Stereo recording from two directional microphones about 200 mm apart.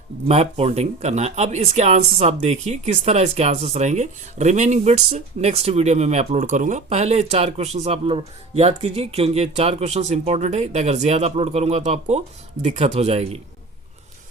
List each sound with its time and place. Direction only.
0.3 s speech: 30° right (ahead or behind)